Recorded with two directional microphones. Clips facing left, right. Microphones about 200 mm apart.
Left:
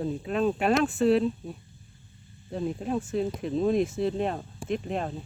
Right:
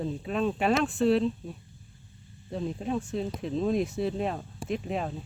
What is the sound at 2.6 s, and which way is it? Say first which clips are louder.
Speech: left 2 dB; 5° left (ahead or behind).